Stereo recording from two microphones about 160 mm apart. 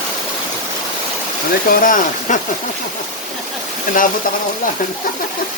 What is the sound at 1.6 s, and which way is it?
Speech, 55° left (ahead or behind).